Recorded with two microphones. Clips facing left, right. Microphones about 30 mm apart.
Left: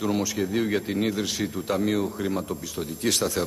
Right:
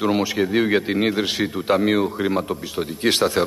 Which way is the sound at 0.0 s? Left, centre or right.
Right.